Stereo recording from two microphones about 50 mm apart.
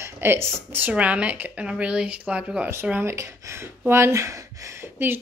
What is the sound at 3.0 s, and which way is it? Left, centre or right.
Speech, right.